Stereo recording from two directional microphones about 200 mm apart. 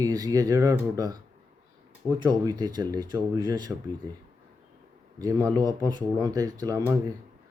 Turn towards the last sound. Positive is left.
turn(degrees=-20)  # may be behind; listen again after turning